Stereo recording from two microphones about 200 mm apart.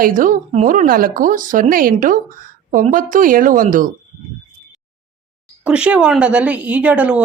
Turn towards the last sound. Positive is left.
turn(degrees=-5)  # may be behind; listen again after turning